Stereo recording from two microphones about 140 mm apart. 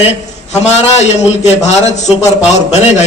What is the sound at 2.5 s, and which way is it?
Speech, 50° left (ahead or behind).